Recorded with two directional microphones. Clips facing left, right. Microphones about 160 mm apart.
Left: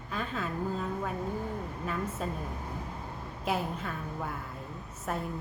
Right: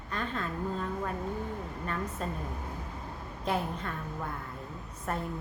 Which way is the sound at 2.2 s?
5° left (ahead or behind).